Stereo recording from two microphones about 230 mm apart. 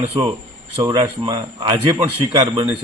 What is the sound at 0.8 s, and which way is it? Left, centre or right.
A man's voice, right.